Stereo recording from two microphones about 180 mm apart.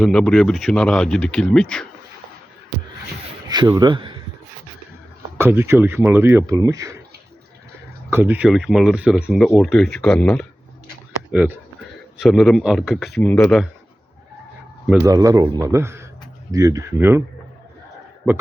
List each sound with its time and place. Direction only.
0.0 s speech: 5° left (ahead or behind)
3.5 s speech: 25° right (ahead or behind)
5.4 s speech: 15° right (ahead or behind)
8.1 s speech: 10° right (ahead or behind)
11.3 s speech: 10° right (ahead or behind)
15.0 s a man's voice: 20° right (ahead or behind)